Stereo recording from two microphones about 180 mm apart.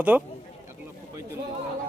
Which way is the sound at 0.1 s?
5° right (ahead or behind).